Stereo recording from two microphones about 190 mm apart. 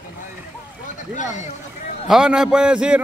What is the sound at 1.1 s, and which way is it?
Speech, 40° left (ahead or behind).